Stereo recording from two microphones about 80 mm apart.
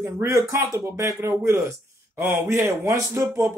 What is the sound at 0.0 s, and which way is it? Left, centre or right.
Speech, right.